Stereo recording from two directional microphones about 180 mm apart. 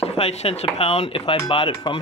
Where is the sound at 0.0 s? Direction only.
35° left (ahead or behind).